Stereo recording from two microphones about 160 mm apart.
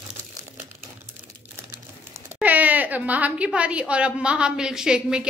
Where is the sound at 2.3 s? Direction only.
10° right (ahead or behind).